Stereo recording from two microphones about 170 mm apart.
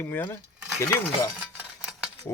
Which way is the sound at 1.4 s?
5° right (ahead or behind).